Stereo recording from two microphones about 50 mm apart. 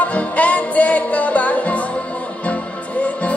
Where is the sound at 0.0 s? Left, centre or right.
Left.